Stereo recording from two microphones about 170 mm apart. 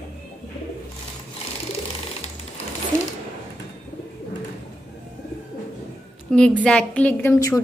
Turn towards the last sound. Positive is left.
turn(degrees=20)  # may be behind; listen again after turning